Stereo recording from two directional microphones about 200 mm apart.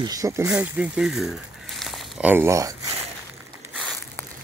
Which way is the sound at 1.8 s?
5° right (ahead or behind).